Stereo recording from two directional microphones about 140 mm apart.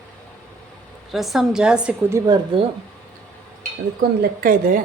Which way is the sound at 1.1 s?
Centre (ahead or behind).